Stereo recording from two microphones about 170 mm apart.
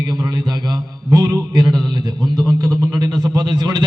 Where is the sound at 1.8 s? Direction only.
25° right (ahead or behind).